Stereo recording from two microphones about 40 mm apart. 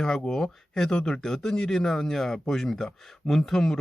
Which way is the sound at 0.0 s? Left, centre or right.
Centre.